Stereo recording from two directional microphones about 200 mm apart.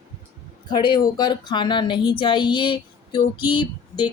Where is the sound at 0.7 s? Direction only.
20° left (ahead or behind).